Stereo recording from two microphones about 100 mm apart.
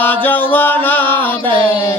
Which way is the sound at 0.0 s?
15° left (ahead or behind).